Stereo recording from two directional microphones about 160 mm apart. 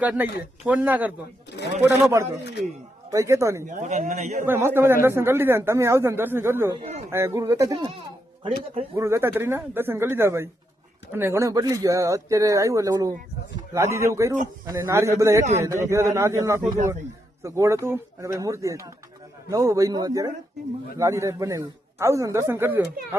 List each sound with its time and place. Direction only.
0.0 s a man's voice: 10° right (ahead or behind)
2.4 s a man's voice: 90° left
3.1 s a man's voice: 20° right (ahead or behind)
3.7 s speech: 50° right (ahead or behind)
4.4 s a man's voice: 15° right (ahead or behind)
9.0 s a man's voice: 15° right (ahead or behind)